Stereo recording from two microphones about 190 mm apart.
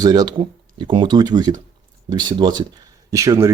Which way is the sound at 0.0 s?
20° right (ahead or behind).